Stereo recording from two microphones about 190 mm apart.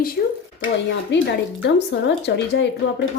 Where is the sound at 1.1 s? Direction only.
70° left (ahead or behind).